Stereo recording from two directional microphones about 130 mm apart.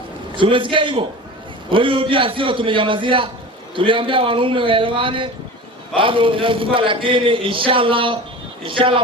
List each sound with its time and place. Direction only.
0.3 s a man's voice: 40° right (ahead or behind)